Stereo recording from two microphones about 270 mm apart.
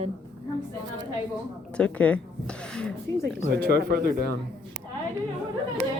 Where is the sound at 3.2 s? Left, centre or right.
Right.